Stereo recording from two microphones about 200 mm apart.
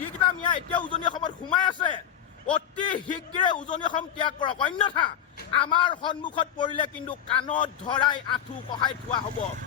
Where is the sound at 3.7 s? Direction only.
25° left (ahead or behind).